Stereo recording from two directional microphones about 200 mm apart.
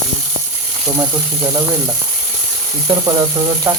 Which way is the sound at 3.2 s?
15° right (ahead or behind).